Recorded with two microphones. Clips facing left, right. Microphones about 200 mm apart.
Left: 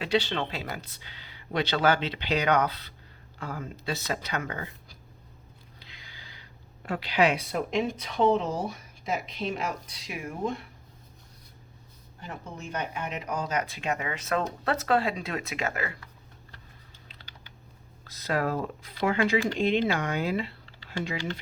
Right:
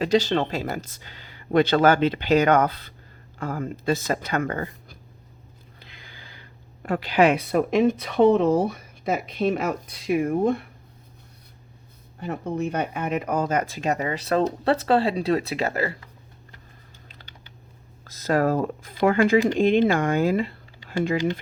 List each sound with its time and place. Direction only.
0.0 s speech: 45° right (ahead or behind)
12.2 s speech: 60° right (ahead or behind); by 16.0 s 35° right (ahead or behind)
18.0 s speech: 45° right (ahead or behind)